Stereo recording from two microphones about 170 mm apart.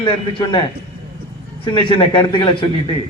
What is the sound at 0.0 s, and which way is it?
Speech, 25° left (ahead or behind).